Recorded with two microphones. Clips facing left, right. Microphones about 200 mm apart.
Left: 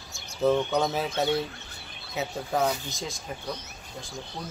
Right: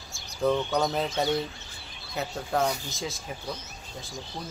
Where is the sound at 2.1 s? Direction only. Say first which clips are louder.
Even; 5° left (ahead or behind).